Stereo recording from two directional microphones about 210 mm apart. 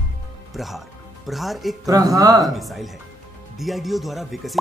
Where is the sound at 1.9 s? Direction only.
20° right (ahead or behind).